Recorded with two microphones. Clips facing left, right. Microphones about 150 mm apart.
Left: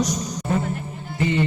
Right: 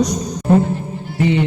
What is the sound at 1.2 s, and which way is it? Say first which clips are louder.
Music: right 5 dB; 65° right (ahead or behind).